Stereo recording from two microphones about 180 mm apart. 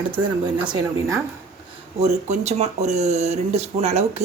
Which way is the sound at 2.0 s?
40° right (ahead or behind).